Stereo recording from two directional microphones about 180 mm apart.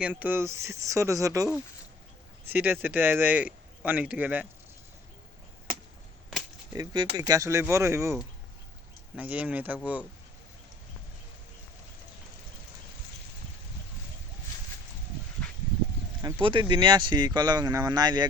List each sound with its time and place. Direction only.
0.0 s speech: 10° right (ahead or behind)
2.5 s speech: 10° right (ahead or behind)
6.7 s speech: 25° right (ahead or behind)
9.1 s speech: 10° right (ahead or behind)
16.2 s speech: 25° right (ahead or behind)